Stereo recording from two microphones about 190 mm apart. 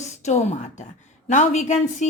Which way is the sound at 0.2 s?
35° left (ahead or behind).